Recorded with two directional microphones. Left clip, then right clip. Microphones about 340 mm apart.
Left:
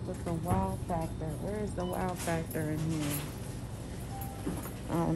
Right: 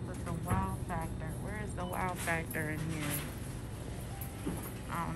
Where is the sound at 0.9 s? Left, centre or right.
Centre.